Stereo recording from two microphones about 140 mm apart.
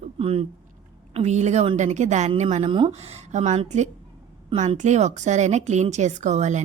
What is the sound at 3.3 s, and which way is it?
Speech, 55° right (ahead or behind).